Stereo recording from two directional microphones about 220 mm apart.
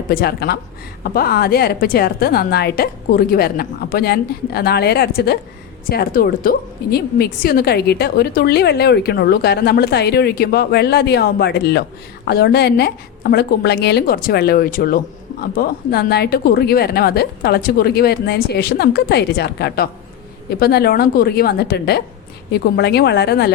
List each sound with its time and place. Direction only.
0.1 s a woman's voice: 45° left (ahead or behind)